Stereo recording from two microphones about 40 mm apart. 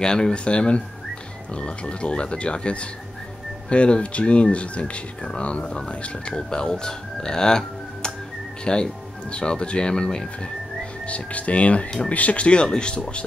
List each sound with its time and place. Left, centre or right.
0.0 s speech: centre
11.1 s speech: left